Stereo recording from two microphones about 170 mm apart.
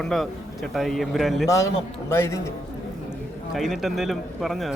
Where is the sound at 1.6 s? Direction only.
15° left (ahead or behind).